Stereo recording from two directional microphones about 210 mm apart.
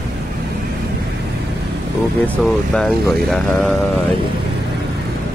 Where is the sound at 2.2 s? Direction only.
5° left (ahead or behind).